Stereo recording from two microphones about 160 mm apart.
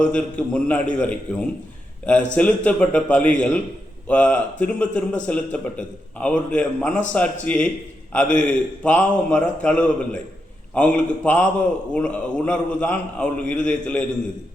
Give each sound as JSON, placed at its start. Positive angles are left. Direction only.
{"t": 0.0, "sound": "a man's voice", "side_deg": 5}